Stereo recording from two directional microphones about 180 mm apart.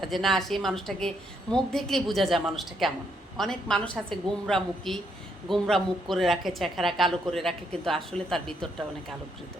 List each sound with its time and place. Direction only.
0.0 s a woman's voice: centre (ahead or behind)